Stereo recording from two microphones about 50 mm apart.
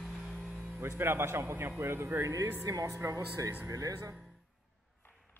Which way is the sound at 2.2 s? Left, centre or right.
Right.